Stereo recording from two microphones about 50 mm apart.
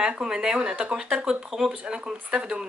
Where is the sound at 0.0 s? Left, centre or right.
Centre.